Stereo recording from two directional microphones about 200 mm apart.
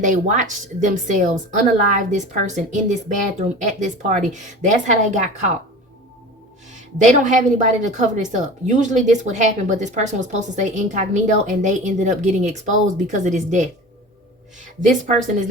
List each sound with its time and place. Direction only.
0.0 s a woman's voice: 40° right (ahead or behind)
7.3 s a woman's voice: 40° right (ahead or behind)
14.8 s a woman's voice: 40° right (ahead or behind)